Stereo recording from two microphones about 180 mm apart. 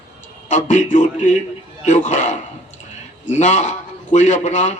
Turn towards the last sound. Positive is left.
turn(degrees=40)  # may be behind; listen again after turning